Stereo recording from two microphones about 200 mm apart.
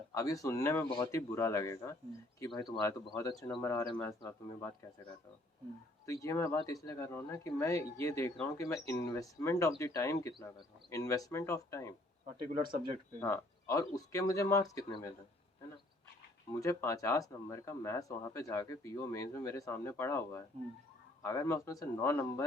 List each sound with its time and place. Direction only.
0.1 s speech: 15° left (ahead or behind)
6.1 s speech: 15° left (ahead or behind)
12.4 s speech: 25° right (ahead or behind)
13.1 s speech: 15° left (ahead or behind)
16.5 s speech: 15° left (ahead or behind)